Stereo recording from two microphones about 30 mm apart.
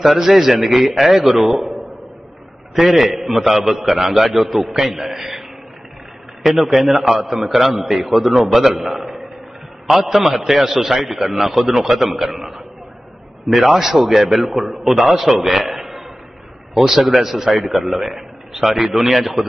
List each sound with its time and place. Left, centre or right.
0.0 s a man's voice: centre
3.1 s a man's voice: centre
6.4 s a man's voice: centre
12.4 s a sound: centre
13.5 s a man's voice: centre
15.7 s a sound: centre
16.7 s a man's voice: centre